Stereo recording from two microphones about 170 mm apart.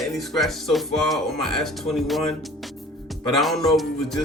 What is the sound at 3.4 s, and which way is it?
Speech, centre (ahead or behind).